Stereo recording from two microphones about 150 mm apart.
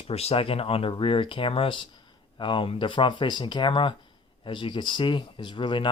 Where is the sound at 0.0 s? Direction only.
40° left (ahead or behind).